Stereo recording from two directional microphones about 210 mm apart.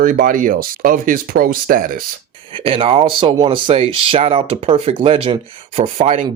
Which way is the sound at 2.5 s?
25° right (ahead or behind).